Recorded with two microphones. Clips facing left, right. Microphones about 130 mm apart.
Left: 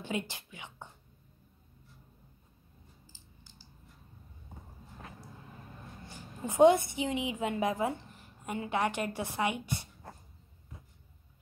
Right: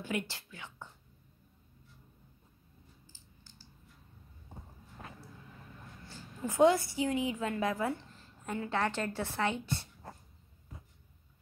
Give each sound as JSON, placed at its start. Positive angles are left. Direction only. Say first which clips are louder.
{"t": 0.0, "sound": "a woman's voice", "louder": "even", "side_deg": 20}
{"t": 6.0, "sound": "a woman's voice", "louder": "right 1 dB", "side_deg": 20}